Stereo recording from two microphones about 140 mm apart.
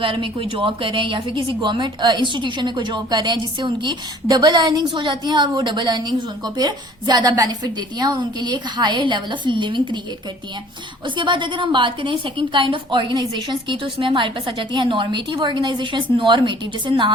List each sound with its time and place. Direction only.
0.0 s a woman's voice: 40° right (ahead or behind)
11.0 s a woman's voice: 35° right (ahead or behind)